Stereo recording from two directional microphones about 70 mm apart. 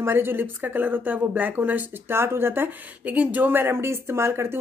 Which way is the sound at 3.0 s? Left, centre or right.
Right.